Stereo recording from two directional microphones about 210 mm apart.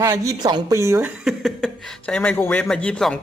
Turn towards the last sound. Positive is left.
turn(degrees=5)  # may be behind; listen again after turning